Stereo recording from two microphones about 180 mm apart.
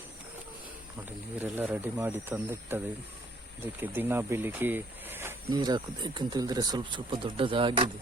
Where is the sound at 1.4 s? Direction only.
10° right (ahead or behind); by 7.9 s 30° right (ahead or behind).